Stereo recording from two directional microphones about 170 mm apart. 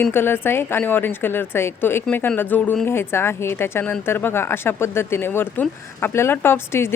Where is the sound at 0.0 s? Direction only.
15° left (ahead or behind).